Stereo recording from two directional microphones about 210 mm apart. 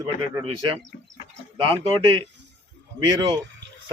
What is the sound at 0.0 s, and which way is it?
Speech, 20° right (ahead or behind).